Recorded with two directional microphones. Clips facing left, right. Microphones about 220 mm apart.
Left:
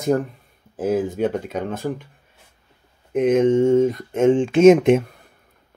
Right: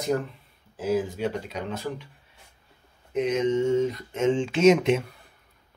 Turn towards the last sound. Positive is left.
turn(degrees=50)  # may be behind; listen again after turning